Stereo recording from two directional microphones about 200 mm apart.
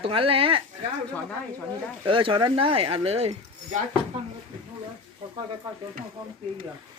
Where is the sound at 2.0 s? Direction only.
25° right (ahead or behind).